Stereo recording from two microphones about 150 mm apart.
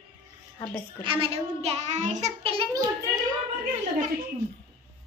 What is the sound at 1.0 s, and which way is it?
A child's voice, 35° right (ahead or behind).